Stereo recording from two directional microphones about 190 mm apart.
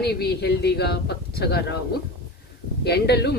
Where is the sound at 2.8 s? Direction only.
60° left (ahead or behind).